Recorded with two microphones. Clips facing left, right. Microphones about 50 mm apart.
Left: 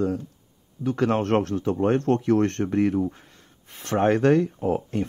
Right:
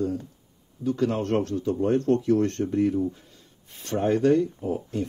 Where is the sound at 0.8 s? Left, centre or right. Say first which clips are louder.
Left 2 dB; left.